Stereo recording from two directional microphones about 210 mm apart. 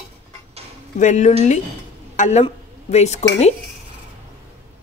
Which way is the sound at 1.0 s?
35° left (ahead or behind).